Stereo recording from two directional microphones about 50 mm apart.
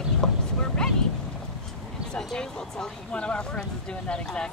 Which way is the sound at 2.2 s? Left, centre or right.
Centre.